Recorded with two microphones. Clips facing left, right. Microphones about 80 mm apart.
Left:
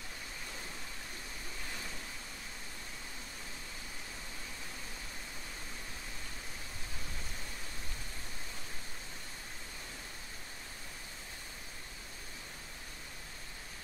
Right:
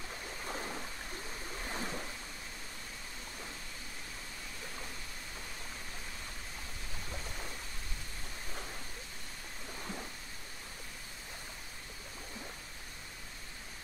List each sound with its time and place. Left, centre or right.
1.7 s ocean: right